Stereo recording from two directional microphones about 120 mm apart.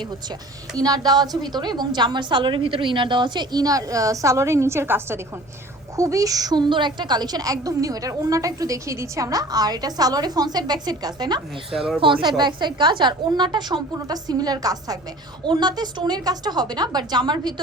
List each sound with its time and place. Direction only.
0.8 s a woman's voice: 30° right (ahead or behind)
11.9 s a woman's voice: 45° right (ahead or behind)